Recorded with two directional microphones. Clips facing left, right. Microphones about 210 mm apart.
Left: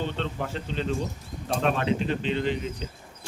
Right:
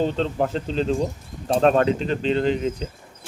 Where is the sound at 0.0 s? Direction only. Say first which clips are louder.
Right 8 dB; 40° right (ahead or behind).